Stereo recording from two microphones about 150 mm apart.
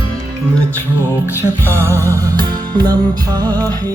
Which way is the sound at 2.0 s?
25° right (ahead or behind).